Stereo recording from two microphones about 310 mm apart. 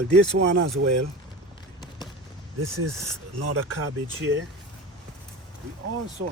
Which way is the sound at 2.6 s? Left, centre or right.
Right.